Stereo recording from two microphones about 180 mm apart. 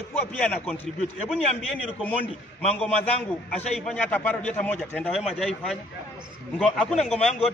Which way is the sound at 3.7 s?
5° left (ahead or behind).